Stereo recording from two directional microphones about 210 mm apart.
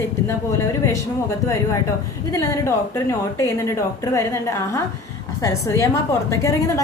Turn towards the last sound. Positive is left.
turn(degrees=15)  # may be behind; listen again after turning